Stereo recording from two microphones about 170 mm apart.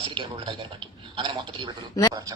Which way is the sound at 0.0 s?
30° right (ahead or behind).